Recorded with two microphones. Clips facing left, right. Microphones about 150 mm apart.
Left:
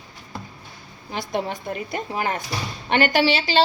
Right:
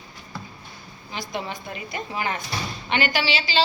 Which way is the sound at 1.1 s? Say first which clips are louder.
Left 5 dB; 55° left (ahead or behind).